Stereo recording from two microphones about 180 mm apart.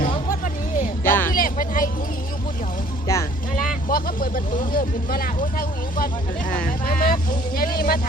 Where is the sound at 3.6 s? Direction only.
50° left (ahead or behind).